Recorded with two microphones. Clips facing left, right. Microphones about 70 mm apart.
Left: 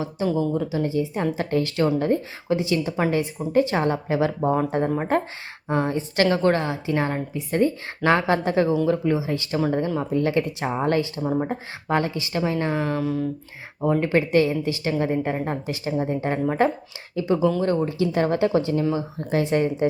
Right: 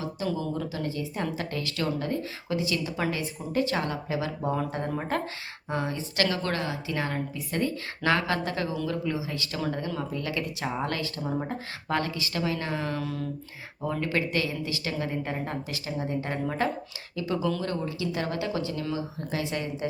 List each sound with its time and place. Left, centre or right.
0.3 s speech: left
13.8 s speech: left